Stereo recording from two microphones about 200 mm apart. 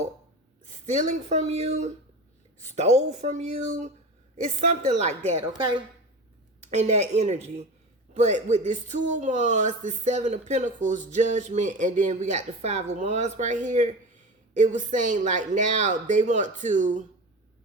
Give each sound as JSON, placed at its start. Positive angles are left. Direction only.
{"t": 0.9, "sound": "speech", "side_deg": -35}